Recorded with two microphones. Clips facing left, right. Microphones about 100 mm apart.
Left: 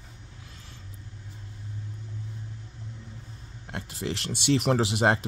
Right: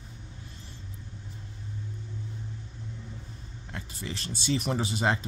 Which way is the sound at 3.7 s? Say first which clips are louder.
Left 6 dB; 85° left.